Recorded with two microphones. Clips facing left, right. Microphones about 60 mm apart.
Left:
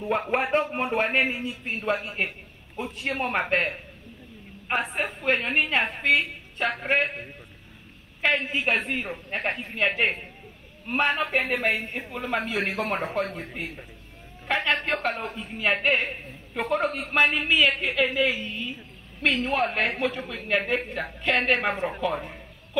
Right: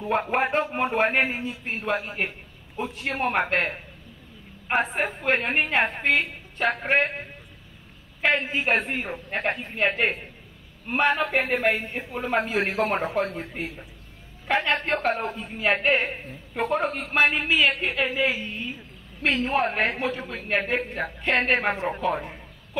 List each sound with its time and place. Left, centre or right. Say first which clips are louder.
0.0 s a woman's voice: right 2 dB; right
8.3 s a woman's voice: right 1 dB; right
14.5 s a woman's voice: right 2 dB; right
19.5 s a woman's voice: right 1 dB; right